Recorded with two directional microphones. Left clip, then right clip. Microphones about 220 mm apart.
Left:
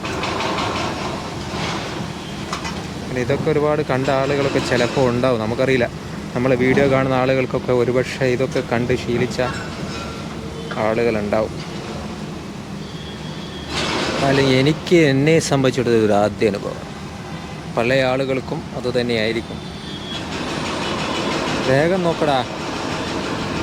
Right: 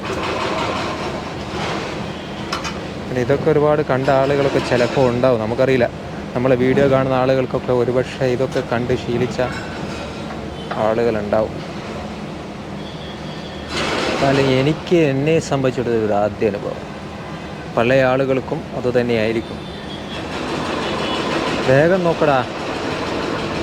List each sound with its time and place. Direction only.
3.2 s speech: centre (ahead or behind)
10.8 s speech: 10° left (ahead or behind)
14.5 s speech: 15° left (ahead or behind)
17.7 s speech: 5° right (ahead or behind)
21.7 s speech: centre (ahead or behind)